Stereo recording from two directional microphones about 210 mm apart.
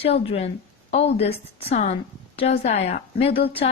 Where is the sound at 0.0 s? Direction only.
30° left (ahead or behind).